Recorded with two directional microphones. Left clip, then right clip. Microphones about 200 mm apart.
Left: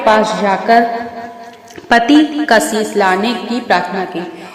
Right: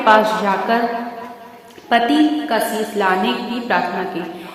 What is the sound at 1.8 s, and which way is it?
Speech, 30° left (ahead or behind).